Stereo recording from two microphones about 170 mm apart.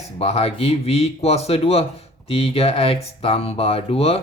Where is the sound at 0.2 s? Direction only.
35° left (ahead or behind).